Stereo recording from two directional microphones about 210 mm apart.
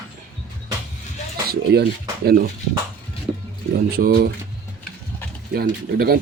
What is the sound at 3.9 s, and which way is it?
Speech, 45° right (ahead or behind).